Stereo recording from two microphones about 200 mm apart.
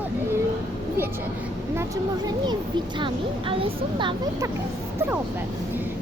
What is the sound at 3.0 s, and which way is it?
Speech, 25° right (ahead or behind).